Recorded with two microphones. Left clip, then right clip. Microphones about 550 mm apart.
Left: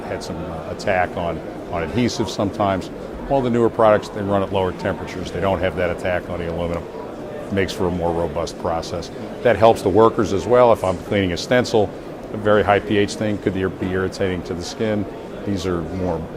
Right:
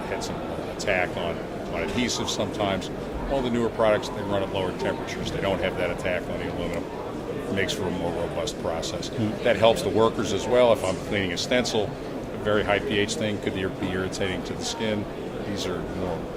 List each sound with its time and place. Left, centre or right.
0.9 s speech: left
9.4 s speech: left